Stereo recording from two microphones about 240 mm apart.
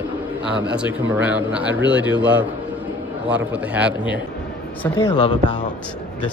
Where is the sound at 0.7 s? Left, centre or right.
Centre.